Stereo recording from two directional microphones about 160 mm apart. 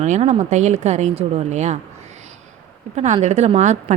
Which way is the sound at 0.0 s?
45° right (ahead or behind).